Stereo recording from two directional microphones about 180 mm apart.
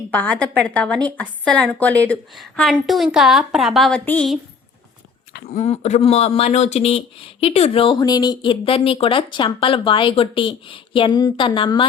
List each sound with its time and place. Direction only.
0.1 s a woman's voice: 5° left (ahead or behind)
5.3 s speech: 55° left (ahead or behind)
5.6 s speech: 40° left (ahead or behind)